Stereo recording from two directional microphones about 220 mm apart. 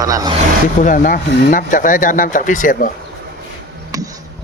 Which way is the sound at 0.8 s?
35° left (ahead or behind).